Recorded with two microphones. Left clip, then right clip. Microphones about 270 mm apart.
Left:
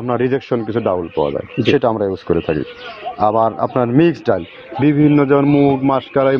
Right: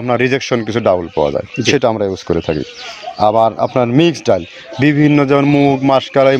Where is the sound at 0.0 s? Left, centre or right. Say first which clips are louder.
Right 3 dB; right.